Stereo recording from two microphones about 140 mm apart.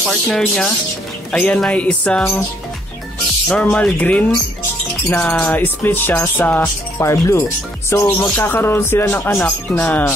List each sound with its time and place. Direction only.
0.3 s speech: 5° left (ahead or behind)
1.3 s music: 10° left (ahead or behind)
3.4 s music: 10° left (ahead or behind)